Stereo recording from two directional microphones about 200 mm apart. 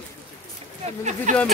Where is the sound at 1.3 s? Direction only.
40° right (ahead or behind).